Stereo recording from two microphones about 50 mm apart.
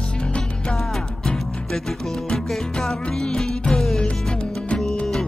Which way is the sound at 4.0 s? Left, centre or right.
Left.